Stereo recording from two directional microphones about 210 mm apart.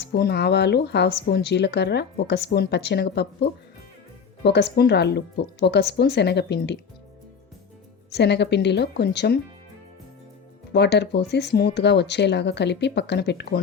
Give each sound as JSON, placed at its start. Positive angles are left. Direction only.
{"t": 0.0, "sound": "speech", "side_deg": 50}
{"t": 4.4, "sound": "speech", "side_deg": 55}
{"t": 8.1, "sound": "speech", "side_deg": 55}
{"t": 10.7, "sound": "speech", "side_deg": 55}